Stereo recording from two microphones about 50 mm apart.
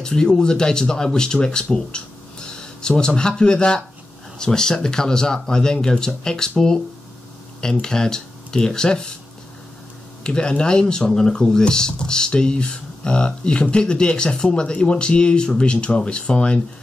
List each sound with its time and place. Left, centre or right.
0.0 s speech: centre
7.8 s speech: centre
10.2 s speech: centre